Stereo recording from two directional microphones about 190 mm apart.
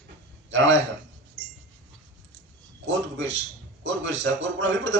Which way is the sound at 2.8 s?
70° right (ahead or behind).